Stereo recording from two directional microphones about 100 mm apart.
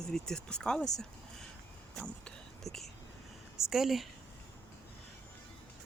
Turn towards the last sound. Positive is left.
turn(degrees=0)  # may be behind; listen again after turning